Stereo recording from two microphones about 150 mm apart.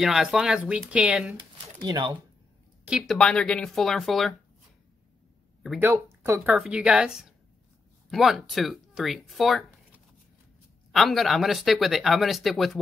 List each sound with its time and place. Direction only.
0.0 s speech: 5° right (ahead or behind)
1.3 s a sound: 30° right (ahead or behind)
3.0 s speech: 5° left (ahead or behind)
5.6 s speech: centre (ahead or behind)
6.2 s a woman's voice: 15° right (ahead or behind)
10.9 s speech: centre (ahead or behind)